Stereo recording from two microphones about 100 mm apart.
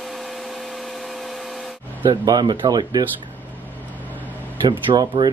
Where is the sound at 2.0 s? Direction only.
40° right (ahead or behind).